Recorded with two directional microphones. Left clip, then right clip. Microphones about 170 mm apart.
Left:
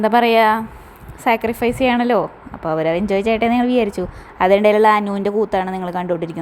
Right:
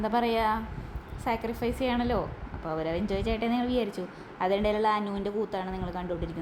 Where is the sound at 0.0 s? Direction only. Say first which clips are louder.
Left 14 dB; 50° left (ahead or behind).